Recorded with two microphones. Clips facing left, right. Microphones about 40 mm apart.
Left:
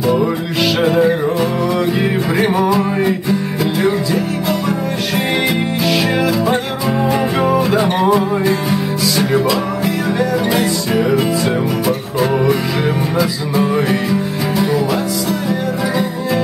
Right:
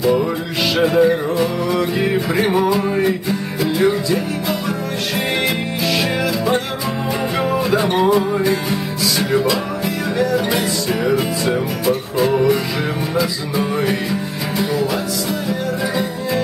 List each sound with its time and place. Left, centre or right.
0.0 s music: centre
5.9 s music: centre